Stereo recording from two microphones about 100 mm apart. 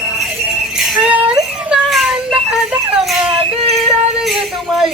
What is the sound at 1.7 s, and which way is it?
Child singing, centre (ahead or behind).